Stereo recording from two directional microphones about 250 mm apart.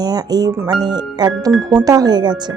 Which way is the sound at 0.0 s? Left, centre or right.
Centre.